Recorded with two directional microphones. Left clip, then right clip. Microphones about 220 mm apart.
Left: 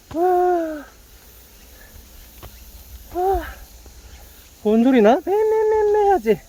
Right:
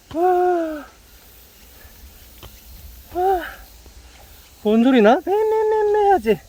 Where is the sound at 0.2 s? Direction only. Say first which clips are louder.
Even; 20° right (ahead or behind).